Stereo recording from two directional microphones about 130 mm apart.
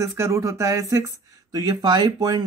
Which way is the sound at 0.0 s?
20° right (ahead or behind).